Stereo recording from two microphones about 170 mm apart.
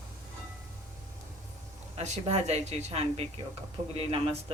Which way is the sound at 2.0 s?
40° right (ahead or behind).